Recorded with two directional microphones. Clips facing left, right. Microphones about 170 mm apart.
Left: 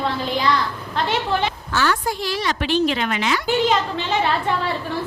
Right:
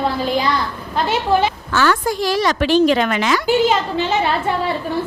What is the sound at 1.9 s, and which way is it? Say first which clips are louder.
Speech: right 5 dB; 45° right (ahead or behind).